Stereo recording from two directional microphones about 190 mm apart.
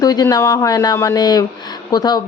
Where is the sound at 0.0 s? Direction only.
20° left (ahead or behind).